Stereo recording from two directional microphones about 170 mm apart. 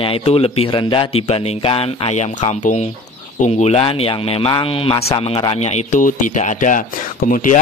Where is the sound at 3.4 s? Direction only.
40° left (ahead or behind).